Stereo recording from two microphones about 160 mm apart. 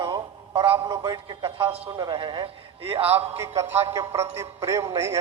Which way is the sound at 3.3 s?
15° right (ahead or behind).